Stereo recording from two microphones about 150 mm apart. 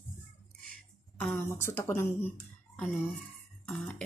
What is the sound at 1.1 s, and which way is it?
A woman's voice, 15° left (ahead or behind).